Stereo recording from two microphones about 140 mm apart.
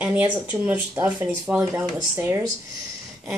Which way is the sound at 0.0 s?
10° right (ahead or behind).